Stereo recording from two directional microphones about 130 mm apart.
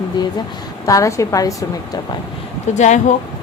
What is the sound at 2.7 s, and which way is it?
Speech, 65° left (ahead or behind).